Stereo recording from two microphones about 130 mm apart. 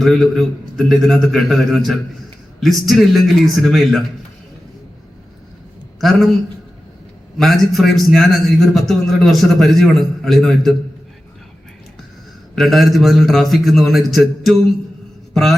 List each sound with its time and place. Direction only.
0.0 s a man's voice: centre (ahead or behind)
6.0 s a man's voice: centre (ahead or behind)
7.3 s a man's voice: centre (ahead or behind)
12.5 s a man's voice: centre (ahead or behind)
15.3 s mantra: centre (ahead or behind)